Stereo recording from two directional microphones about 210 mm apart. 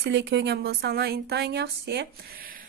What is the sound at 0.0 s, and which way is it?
Speech, 55° right (ahead or behind).